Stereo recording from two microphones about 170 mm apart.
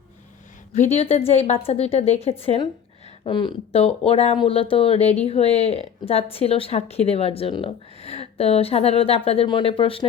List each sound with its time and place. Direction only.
0.7 s speech: 40° left (ahead or behind)